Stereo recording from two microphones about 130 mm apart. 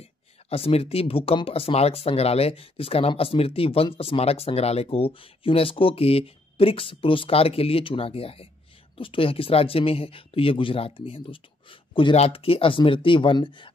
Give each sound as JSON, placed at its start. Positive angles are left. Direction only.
{"t": 0.0, "sound": "speech", "side_deg": 50}